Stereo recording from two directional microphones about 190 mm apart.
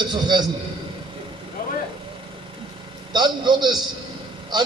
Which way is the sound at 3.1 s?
25° right (ahead or behind).